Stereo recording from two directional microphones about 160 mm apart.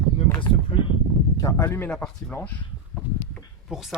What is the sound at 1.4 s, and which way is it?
Speech, 15° left (ahead or behind).